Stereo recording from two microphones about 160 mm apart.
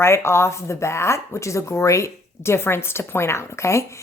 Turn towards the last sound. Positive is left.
turn(degrees=15)  # may be behind; listen again after turning